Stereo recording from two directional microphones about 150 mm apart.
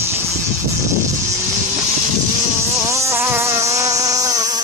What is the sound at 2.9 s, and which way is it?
Insect, 20° right (ahead or behind).